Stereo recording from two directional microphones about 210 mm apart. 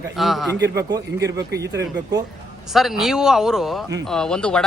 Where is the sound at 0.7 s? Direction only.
15° right (ahead or behind).